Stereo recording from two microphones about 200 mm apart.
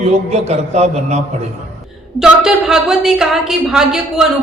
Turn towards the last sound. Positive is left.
turn(degrees=-5)  # may be behind; listen again after turning